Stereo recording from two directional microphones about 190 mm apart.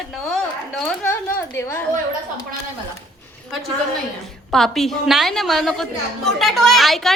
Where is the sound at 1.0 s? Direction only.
15° left (ahead or behind).